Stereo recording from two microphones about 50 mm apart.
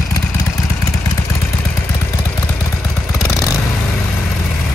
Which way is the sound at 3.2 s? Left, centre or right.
Left.